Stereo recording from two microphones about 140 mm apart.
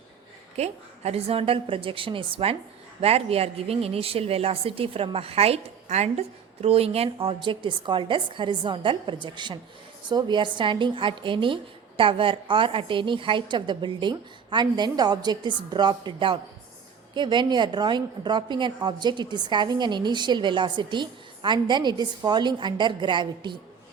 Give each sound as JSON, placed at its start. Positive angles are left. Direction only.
{"t": 0.5, "sound": "a woman's voice", "side_deg": -50}